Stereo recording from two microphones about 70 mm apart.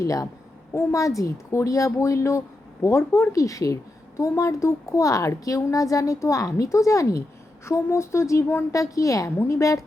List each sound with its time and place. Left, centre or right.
0.0 s a woman's voice: left
0.7 s a woman's voice: left
8.7 s a woman's voice: left